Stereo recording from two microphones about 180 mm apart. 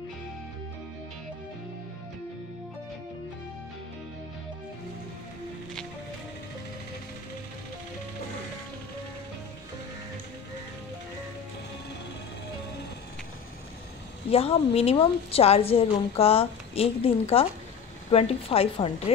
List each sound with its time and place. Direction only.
14.3 s a woman's voice: 30° left (ahead or behind)